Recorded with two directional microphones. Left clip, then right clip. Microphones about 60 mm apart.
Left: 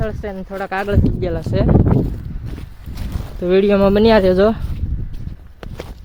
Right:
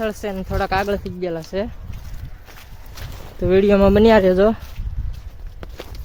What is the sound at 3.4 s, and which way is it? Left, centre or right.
Speech, centre.